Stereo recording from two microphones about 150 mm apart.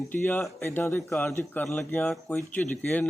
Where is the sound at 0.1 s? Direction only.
15° left (ahead or behind).